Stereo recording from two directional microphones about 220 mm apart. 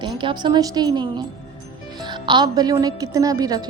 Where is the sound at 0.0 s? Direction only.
20° right (ahead or behind).